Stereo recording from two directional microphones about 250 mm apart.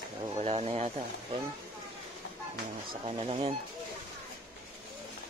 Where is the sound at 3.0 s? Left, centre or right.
Right.